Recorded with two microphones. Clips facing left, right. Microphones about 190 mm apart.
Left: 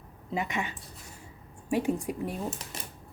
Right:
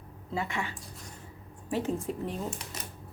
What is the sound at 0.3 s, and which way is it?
A woman's voice, 20° left (ahead or behind).